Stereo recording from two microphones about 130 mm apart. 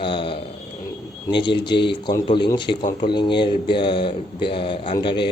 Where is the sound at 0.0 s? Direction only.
40° left (ahead or behind).